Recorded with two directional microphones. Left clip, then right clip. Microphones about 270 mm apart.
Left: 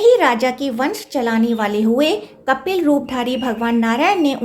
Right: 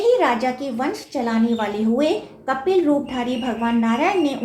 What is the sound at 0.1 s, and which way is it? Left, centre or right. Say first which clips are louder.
A woman's voice: left 4 dB; left.